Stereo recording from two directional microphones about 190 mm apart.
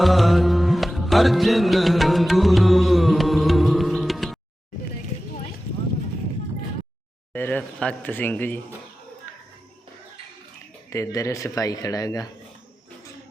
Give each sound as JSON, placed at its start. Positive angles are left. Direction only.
{"t": 0.0, "sound": "music", "side_deg": 0}
{"t": 7.3, "sound": "a sound", "side_deg": 10}
{"t": 10.8, "sound": "speech", "side_deg": 15}